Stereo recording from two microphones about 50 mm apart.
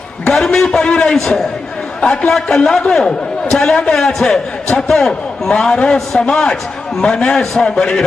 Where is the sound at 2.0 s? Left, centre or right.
Left.